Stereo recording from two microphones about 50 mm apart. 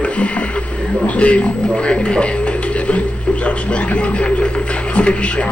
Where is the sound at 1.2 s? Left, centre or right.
Left.